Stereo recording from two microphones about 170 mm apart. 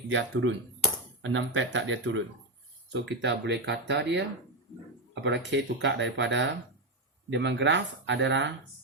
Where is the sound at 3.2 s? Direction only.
90° right.